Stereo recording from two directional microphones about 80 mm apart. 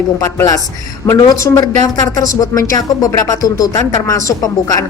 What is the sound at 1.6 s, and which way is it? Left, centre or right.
Speech, left.